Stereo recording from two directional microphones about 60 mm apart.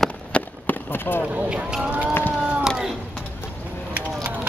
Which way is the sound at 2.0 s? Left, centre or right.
Left.